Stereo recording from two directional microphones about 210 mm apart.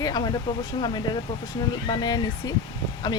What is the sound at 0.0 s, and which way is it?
Speech, 20° left (ahead or behind).